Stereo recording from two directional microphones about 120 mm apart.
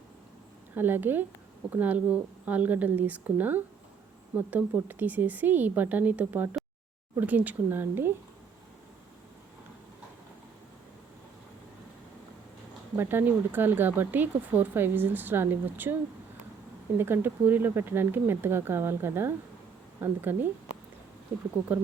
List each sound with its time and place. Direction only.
0.8 s speech: 15° right (ahead or behind)
13.0 s speech: 15° right (ahead or behind)
17.0 s speech: 15° right (ahead or behind)